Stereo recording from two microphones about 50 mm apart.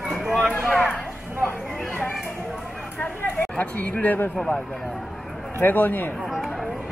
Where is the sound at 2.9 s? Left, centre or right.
Left.